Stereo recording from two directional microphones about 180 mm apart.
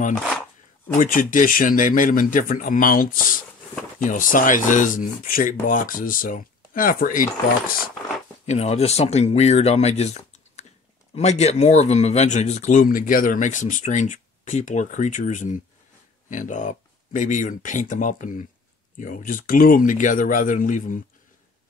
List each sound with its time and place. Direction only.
0.9 s speech: 45° left (ahead or behind)
8.5 s speech: 35° left (ahead or behind)